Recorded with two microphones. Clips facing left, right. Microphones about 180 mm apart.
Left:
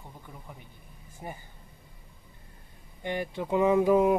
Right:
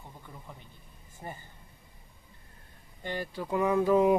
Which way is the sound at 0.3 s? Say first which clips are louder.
Left 1 dB; 5° left (ahead or behind).